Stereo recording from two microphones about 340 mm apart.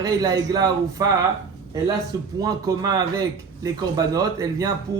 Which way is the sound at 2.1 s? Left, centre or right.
Centre.